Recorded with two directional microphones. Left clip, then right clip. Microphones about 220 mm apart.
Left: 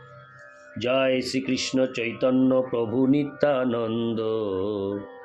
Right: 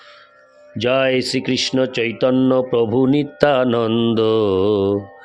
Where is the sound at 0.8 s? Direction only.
50° right (ahead or behind).